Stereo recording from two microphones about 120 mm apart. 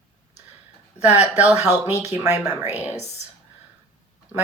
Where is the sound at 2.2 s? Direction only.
15° right (ahead or behind).